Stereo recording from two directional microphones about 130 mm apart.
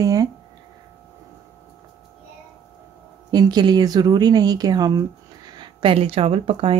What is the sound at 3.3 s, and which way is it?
Speech, 30° right (ahead or behind).